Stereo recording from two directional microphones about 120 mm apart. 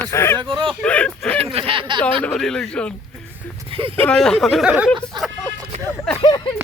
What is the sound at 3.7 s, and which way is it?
Speech, 50° right (ahead or behind).